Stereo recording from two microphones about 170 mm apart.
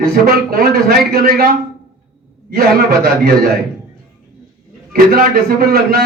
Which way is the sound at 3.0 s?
65° right (ahead or behind).